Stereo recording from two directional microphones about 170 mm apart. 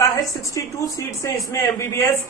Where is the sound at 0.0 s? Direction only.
20° left (ahead or behind).